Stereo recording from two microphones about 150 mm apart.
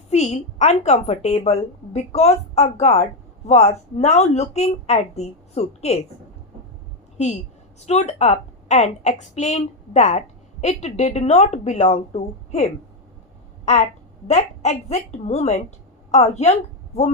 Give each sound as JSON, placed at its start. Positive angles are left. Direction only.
{"t": 0.1, "sound": "a woman's voice", "side_deg": 45}
{"t": 7.9, "sound": "a woman's voice", "side_deg": 45}
{"t": 14.3, "sound": "a woman's voice", "side_deg": 50}